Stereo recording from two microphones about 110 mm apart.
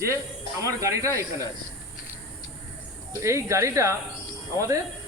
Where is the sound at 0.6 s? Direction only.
30° right (ahead or behind).